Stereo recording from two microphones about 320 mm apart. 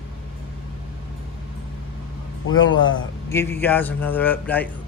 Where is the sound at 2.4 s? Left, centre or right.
Left.